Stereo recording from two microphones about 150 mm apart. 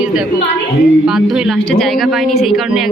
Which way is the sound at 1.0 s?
5° right (ahead or behind).